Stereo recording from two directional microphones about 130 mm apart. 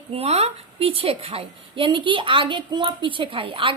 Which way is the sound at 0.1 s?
50° right (ahead or behind).